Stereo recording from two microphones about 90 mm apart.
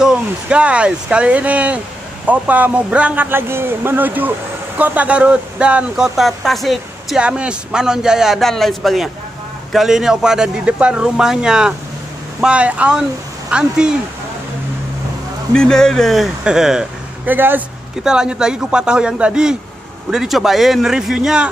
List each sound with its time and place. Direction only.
0.0 s speech: 10° right (ahead or behind)
3.3 s speech: 25° right (ahead or behind); by 7.2 s centre (ahead or behind)
7.2 s speech: 10° right (ahead or behind)
15.5 s speech: 5° left (ahead or behind)
17.3 s speech: 20° right (ahead or behind)
18.0 s speech: 10° right (ahead or behind)